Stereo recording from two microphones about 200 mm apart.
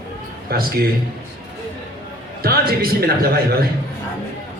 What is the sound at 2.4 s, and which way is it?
Speech, 50° right (ahead or behind).